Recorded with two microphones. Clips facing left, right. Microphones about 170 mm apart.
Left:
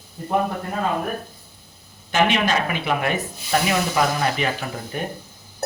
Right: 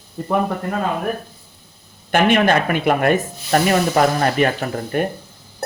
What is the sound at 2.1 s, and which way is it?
Speech, 55° right (ahead or behind).